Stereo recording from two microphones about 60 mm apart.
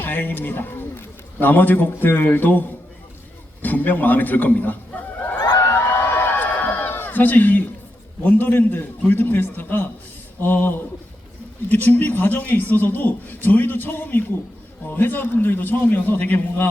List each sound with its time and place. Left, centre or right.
0.0 s a man's voice: left
5.5 s a sound: left
8.2 s a man's voice: left